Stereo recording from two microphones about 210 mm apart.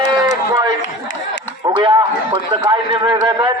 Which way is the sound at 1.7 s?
20° right (ahead or behind).